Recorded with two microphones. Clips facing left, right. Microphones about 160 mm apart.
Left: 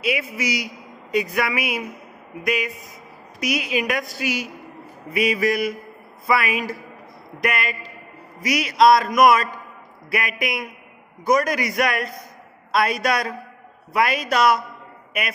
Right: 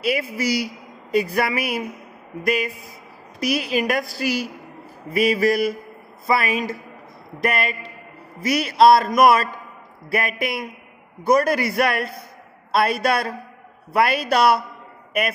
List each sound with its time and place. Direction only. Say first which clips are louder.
0.0 s a woman's voice: right 2 dB; 35° right (ahead or behind)
3.3 s a woman's voice: right 2 dB; 35° right (ahead or behind)